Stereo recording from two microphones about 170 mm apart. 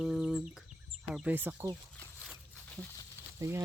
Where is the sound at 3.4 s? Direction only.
15° right (ahead or behind).